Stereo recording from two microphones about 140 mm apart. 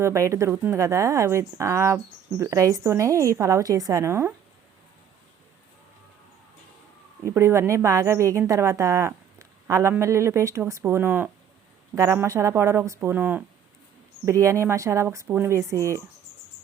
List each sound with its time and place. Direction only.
0.0 s speech: 20° right (ahead or behind)
7.3 s speech: 20° right (ahead or behind)